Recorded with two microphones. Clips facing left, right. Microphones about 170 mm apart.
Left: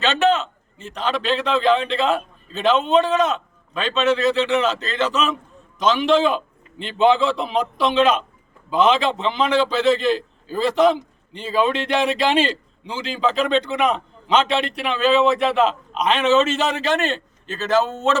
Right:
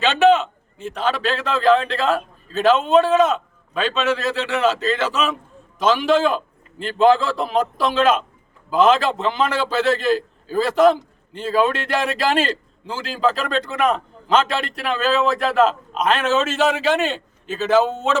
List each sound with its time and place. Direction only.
0.0 s a man's voice: 10° right (ahead or behind)